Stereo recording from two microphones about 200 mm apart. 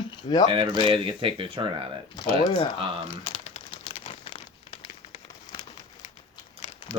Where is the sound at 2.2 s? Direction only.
25° left (ahead or behind).